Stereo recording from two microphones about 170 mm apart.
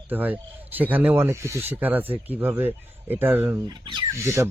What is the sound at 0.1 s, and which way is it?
Speech, 10° right (ahead or behind).